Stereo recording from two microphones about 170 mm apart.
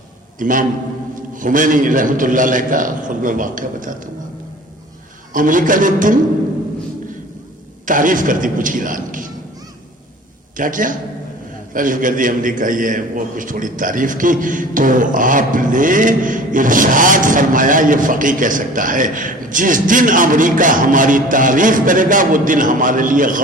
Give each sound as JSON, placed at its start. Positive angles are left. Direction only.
{"t": 0.3, "sound": "a man's voice", "side_deg": -50}
{"t": 5.3, "sound": "a man's voice", "side_deg": -50}
{"t": 7.9, "sound": "a man's voice", "side_deg": -50}
{"t": 10.6, "sound": "a man's voice", "side_deg": -50}